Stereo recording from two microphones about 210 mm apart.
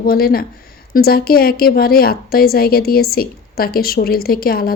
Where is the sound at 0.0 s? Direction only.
45° left (ahead or behind).